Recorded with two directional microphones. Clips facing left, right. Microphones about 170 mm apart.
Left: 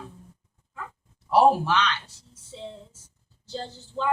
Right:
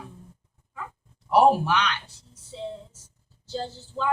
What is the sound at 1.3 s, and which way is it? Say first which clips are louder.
Speech: even; 15° right (ahead or behind).